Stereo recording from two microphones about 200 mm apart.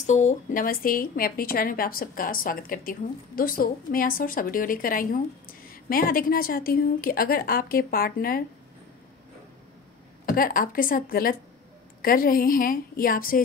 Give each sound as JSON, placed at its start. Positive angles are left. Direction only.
{"t": 0.0, "sound": "speech", "side_deg": 35}
{"t": 10.2, "sound": "speech", "side_deg": 45}